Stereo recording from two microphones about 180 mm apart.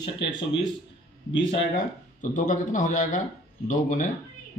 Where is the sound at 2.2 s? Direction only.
45° left (ahead or behind).